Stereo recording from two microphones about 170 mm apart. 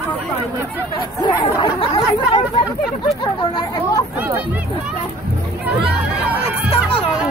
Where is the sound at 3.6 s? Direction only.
20° left (ahead or behind).